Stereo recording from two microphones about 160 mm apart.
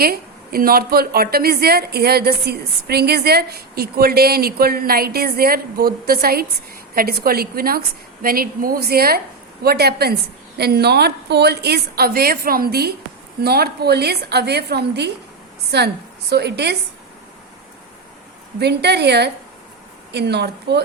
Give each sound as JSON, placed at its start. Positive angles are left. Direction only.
{"t": 0.0, "sound": "a woman's voice", "side_deg": -65}
{"t": 9.6, "sound": "a woman's voice", "side_deg": -85}
{"t": 18.6, "sound": "a woman's voice", "side_deg": -90}